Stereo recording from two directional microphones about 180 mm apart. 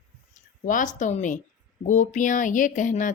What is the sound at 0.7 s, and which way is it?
Speech, 45° left (ahead or behind).